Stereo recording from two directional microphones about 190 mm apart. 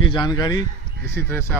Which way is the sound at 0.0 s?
25° left (ahead or behind).